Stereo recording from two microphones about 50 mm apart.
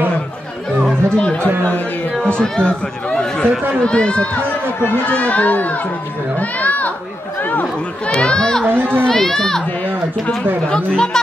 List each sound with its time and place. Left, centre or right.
1.1 s speech: left
5.0 s speech: left
8.2 s speech: centre
8.6 s speech: right
9.0 s speech: centre
10.7 s speech: centre